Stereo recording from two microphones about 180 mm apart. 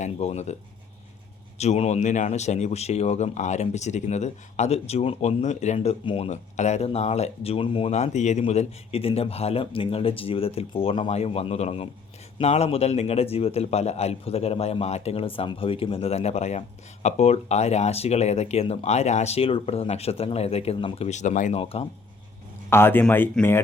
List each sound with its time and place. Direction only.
0.0 s speech: 35° left (ahead or behind)
1.5 s speech: 35° left (ahead or behind)
21.6 s speech: 30° left (ahead or behind)
22.7 s speech: 10° left (ahead or behind)